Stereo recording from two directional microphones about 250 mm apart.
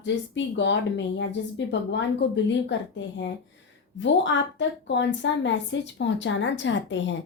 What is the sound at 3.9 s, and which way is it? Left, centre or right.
A woman's voice, left.